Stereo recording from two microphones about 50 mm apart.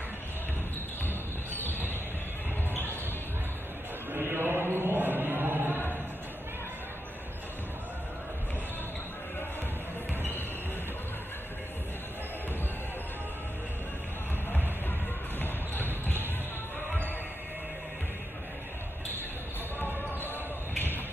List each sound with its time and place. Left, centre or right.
1.0 s cricket: left
2.7 s a sound: left
4.1 s chant: right
15.3 s music: left